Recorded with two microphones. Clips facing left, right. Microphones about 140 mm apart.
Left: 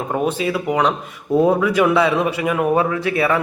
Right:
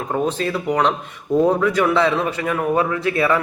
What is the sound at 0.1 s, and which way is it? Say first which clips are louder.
A man's voice: left 1 dB; 10° left (ahead or behind).